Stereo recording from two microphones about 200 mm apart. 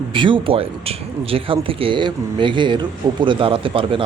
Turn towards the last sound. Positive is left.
turn(degrees=-25)  # may be behind; listen again after turning